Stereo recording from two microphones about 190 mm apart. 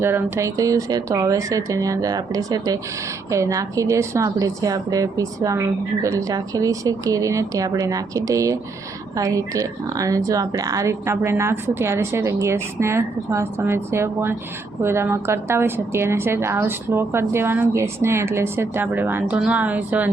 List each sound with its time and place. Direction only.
0.0 s a woman's voice: 15° right (ahead or behind)